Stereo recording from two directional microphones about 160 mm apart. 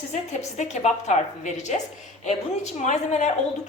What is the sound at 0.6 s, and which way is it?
Speech, 45° left (ahead or behind).